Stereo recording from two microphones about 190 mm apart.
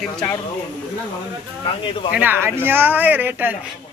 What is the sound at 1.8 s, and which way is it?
Speech, 25° left (ahead or behind).